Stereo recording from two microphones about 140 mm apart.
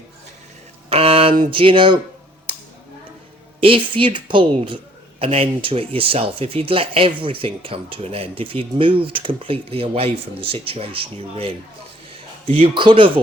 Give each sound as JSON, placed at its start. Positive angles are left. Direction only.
{"t": 0.9, "sound": "a sound", "side_deg": -45}
{"t": 1.5, "sound": "speech", "side_deg": -40}
{"t": 3.6, "sound": "speech", "side_deg": -40}